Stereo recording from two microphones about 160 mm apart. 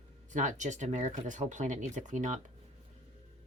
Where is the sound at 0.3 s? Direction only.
50° right (ahead or behind).